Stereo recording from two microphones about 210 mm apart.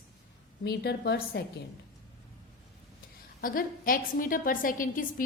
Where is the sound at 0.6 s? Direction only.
50° left (ahead or behind).